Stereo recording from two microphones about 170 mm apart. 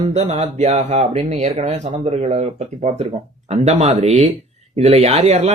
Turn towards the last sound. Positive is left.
turn(degrees=-40)  # may be behind; listen again after turning